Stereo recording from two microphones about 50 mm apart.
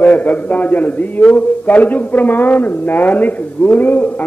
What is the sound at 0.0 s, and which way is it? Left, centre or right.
A man's voice, left.